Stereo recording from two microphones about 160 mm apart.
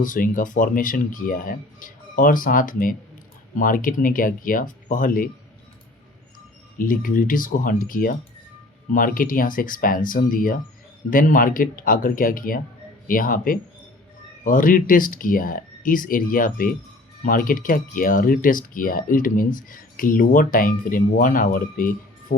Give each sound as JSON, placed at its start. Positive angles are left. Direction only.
{"t": 0.0, "sound": "speech", "side_deg": 55}
{"t": 6.7, "sound": "speech", "side_deg": 60}